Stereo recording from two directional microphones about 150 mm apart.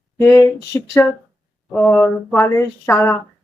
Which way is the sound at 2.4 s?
15° left (ahead or behind).